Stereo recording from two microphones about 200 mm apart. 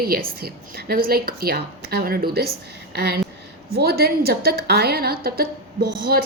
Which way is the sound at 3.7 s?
50° right (ahead or behind).